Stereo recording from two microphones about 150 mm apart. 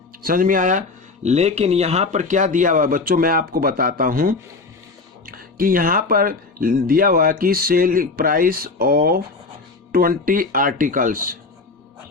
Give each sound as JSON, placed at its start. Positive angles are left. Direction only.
{"t": 0.2, "sound": "speech", "side_deg": -70}